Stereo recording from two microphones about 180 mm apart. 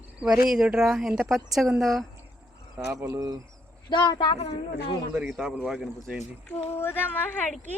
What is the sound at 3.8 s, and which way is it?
Speech, 25° left (ahead or behind).